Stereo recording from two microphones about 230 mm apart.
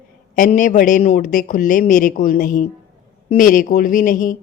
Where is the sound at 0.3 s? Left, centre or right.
Left.